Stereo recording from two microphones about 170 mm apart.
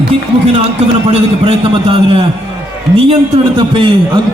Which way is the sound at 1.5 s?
30° right (ahead or behind).